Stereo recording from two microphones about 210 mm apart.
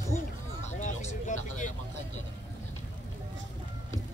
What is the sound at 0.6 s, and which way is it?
Vehicle, 35° left (ahead or behind).